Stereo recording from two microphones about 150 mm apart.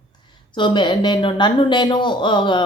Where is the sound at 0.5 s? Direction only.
30° left (ahead or behind).